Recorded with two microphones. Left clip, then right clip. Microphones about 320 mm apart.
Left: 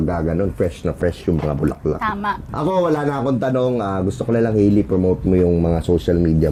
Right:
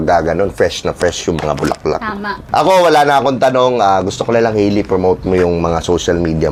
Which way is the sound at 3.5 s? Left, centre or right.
Right.